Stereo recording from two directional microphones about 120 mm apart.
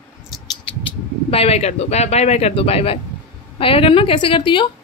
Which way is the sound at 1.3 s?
55° left (ahead or behind).